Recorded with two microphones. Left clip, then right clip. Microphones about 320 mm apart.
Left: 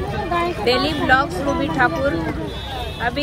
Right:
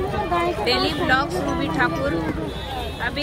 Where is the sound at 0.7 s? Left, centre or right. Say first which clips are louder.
Left 5 dB; centre.